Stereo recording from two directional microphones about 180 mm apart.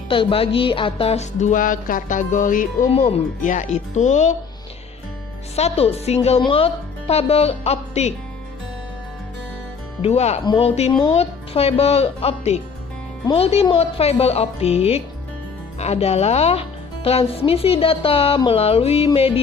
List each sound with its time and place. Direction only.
0.1 s music: 30° left (ahead or behind)
5.5 s music: 35° left (ahead or behind)
10.0 s music: 35° left (ahead or behind)
10.4 s speech: 25° left (ahead or behind)
11.1 s music: 35° left (ahead or behind)